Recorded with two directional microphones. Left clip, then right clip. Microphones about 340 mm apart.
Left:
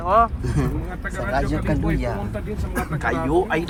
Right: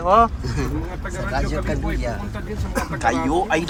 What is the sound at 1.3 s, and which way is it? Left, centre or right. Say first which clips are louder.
Speech: left 2 dB; left.